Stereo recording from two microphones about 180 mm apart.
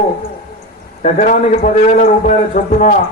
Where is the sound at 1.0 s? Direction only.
45° left (ahead or behind).